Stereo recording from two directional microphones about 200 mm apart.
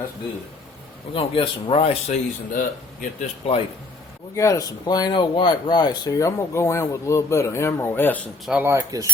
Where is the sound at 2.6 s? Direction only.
40° left (ahead or behind).